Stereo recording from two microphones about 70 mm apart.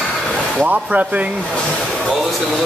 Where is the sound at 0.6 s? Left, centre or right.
Right.